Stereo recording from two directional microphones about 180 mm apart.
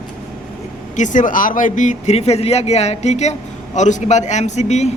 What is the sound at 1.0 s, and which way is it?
Speech, 45° left (ahead or behind).